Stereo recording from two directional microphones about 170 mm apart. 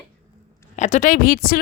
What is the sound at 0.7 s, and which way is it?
Speech, 45° left (ahead or behind).